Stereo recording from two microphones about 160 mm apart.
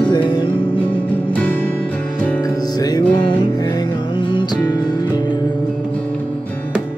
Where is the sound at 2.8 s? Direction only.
25° left (ahead or behind).